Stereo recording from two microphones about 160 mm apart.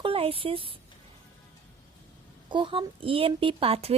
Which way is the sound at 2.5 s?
30° right (ahead or behind).